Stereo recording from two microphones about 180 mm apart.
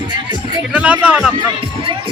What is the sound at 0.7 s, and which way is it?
Speech, 5° right (ahead or behind).